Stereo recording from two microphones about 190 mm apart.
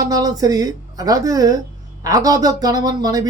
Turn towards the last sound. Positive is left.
turn(degrees=-20)  # may be behind; listen again after turning